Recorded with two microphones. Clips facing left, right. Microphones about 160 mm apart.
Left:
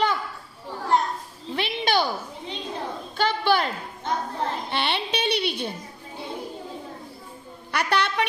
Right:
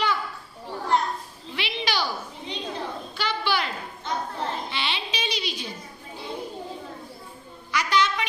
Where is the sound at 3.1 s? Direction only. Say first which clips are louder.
Left 6 dB; 50° left (ahead or behind).